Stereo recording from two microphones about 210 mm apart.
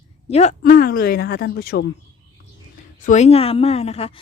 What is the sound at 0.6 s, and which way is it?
Speech, 45° left (ahead or behind).